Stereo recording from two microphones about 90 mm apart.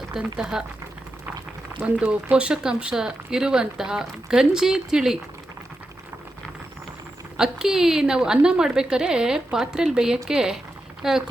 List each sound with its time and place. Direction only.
0.1 s speech: 5° right (ahead or behind)
1.8 s speech: 15° right (ahead or behind)
7.3 s speech: 5° right (ahead or behind)